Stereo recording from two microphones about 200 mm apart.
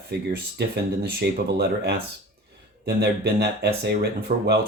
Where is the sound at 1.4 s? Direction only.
55° right (ahead or behind).